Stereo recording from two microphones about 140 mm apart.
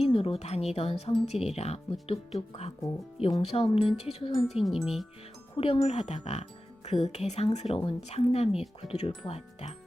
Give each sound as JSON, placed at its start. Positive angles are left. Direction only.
{"t": 0.1, "sound": "speech", "side_deg": 40}
{"t": 4.5, "sound": "music", "side_deg": 0}
{"t": 5.5, "sound": "speech", "side_deg": 40}